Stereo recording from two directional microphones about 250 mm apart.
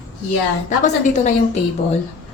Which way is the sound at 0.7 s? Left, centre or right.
Left.